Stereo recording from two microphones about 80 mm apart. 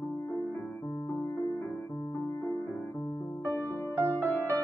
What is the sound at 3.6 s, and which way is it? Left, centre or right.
Music, left.